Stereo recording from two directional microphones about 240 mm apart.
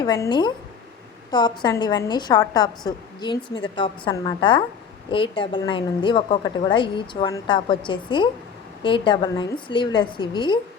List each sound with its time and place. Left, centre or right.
0.0 s a woman's voice: centre